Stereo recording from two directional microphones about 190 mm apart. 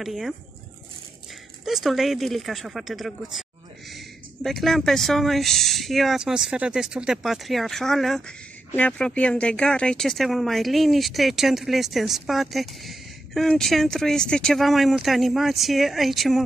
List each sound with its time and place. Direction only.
0.0 s speech: centre (ahead or behind)
1.6 s speech: centre (ahead or behind)